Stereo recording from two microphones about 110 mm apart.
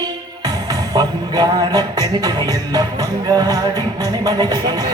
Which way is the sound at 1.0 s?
40° right (ahead or behind).